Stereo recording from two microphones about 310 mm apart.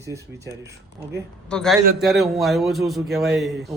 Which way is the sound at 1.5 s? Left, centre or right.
Centre.